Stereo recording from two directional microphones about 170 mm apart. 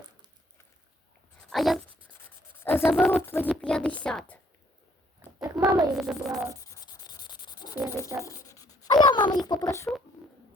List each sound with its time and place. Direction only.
1.5 s speech: centre (ahead or behind)
2.6 s a sound: 15° left (ahead or behind)
2.9 s a woman's voice: centre (ahead or behind)
3.2 s a woman's voice: 15° left (ahead or behind)
5.4 s a sound: 15° right (ahead or behind)
5.9 s a woman's voice: 5° right (ahead or behind)
6.8 s sanding: 25° left (ahead or behind)
8.2 s writing: 20° left (ahead or behind)
9.5 s speech: 20° left (ahead or behind)